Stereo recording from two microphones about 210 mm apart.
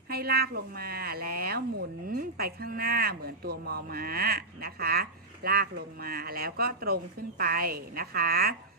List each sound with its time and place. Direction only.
0.1 s speech: 45° right (ahead or behind)